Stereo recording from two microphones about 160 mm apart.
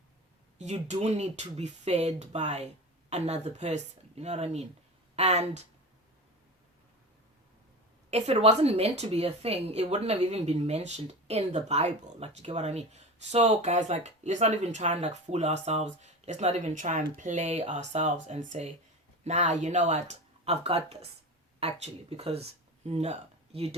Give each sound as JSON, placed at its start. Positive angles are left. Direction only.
{"t": 0.6, "sound": "a woman's voice", "side_deg": -45}
{"t": 8.1, "sound": "a woman's voice", "side_deg": -40}